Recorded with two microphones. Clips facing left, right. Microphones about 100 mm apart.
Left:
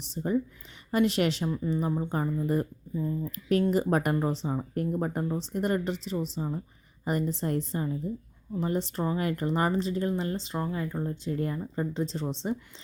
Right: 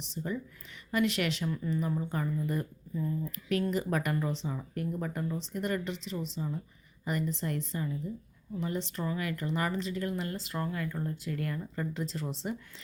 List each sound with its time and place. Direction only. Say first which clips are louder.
0.1 s speech: left 8 dB; 40° left (ahead or behind)
2.9 s speech: left 2 dB; 20° left (ahead or behind)
3.3 s speech: left 7 dB; 40° left (ahead or behind)